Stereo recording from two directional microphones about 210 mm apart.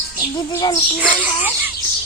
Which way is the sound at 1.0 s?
5° right (ahead or behind).